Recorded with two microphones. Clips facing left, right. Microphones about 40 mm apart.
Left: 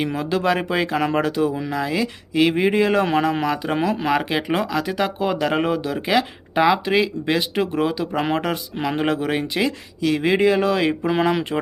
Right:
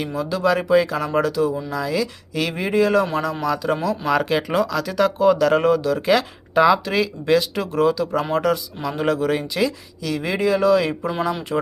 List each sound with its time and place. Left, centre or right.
0.0 s speech: left
4.1 s speech: left
11.5 s speech: centre